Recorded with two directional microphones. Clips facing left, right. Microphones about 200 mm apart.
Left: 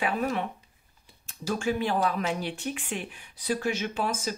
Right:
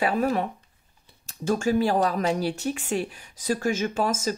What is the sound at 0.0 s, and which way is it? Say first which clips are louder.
Speech: right 5 dB; 40° right (ahead or behind).